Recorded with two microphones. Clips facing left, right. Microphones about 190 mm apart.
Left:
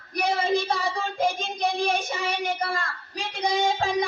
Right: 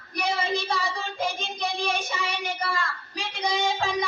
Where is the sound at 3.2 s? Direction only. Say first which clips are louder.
Left 2 dB; 45° left (ahead or behind).